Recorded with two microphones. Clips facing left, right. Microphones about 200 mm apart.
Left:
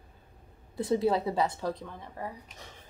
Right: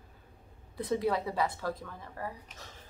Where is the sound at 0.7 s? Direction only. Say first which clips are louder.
Left 4 dB; 30° left (ahead or behind).